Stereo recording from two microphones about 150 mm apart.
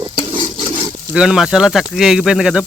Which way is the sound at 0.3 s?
35° right (ahead or behind).